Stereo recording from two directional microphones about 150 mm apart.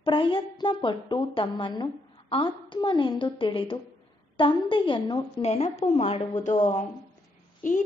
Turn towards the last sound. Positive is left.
turn(degrees=60)  # may be behind; listen again after turning